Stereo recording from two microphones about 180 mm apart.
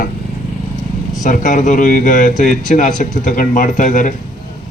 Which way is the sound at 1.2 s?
45° left (ahead or behind).